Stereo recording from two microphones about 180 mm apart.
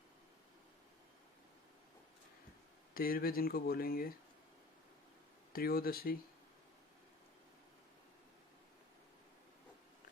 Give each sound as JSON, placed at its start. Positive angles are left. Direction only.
{"t": 2.9, "sound": "speech", "side_deg": 55}
{"t": 5.5, "sound": "speech", "side_deg": 55}